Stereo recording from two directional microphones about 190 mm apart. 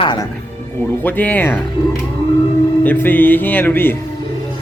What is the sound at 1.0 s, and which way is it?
Speech, 10° left (ahead or behind).